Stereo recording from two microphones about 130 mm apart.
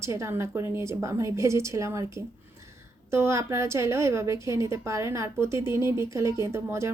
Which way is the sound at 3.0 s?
20° right (ahead or behind).